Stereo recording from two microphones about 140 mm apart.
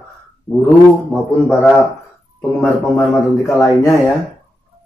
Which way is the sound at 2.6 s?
20° left (ahead or behind).